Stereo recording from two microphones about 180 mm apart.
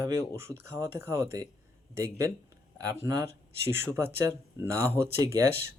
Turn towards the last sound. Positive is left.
turn(degrees=-15)  # may be behind; listen again after turning